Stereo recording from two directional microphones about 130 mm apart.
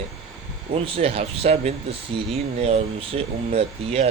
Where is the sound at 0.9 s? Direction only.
45° right (ahead or behind).